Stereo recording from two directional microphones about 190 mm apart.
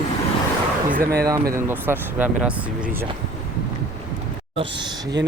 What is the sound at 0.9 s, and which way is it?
Speech, 50° right (ahead or behind).